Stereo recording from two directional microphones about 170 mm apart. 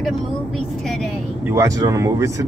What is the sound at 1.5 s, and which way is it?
Speech, 15° right (ahead or behind).